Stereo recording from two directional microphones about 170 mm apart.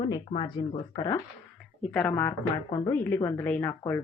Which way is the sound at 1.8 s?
5° left (ahead or behind).